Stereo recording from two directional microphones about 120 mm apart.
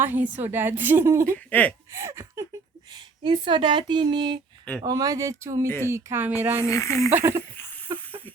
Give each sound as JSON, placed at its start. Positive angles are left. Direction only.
{"t": 0.0, "sound": "a woman's voice", "side_deg": -15}
{"t": 1.5, "sound": "speech", "side_deg": 10}
{"t": 1.9, "sound": "speech", "side_deg": -20}
{"t": 3.2, "sound": "speech", "side_deg": -40}
{"t": 5.6, "sound": "speech", "side_deg": 20}
{"t": 5.9, "sound": "a woman's voice", "side_deg": -20}
{"t": 6.6, "sound": "speech", "side_deg": 25}
{"t": 7.1, "sound": "speech", "side_deg": -20}
{"t": 7.9, "sound": "hiss", "side_deg": -25}